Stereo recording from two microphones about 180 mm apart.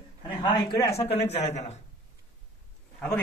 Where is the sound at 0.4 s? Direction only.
25° left (ahead or behind).